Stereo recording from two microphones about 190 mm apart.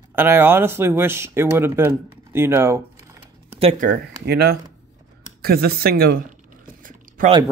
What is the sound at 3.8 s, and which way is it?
Speech, 55° right (ahead or behind).